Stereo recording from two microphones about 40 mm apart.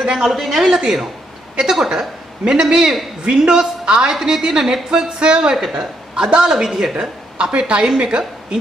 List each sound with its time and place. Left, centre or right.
0.0 s a woman's voice: centre
7.3 s a woman's voice: right